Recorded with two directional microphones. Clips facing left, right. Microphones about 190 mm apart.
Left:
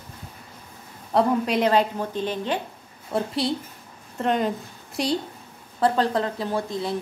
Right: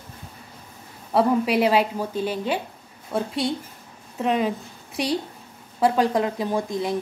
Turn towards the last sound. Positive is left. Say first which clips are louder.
# right 2 dB
turn(degrees=-15)  # may be behind; listen again after turning